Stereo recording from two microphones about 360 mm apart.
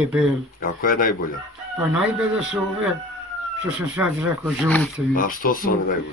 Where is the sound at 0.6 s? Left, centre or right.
Left.